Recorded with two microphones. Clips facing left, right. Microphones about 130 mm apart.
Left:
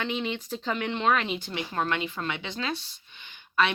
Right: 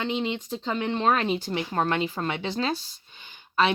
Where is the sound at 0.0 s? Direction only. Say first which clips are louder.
Right 3 dB; 30° right (ahead or behind).